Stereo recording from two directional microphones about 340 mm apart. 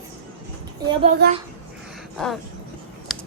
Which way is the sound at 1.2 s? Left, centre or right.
Right.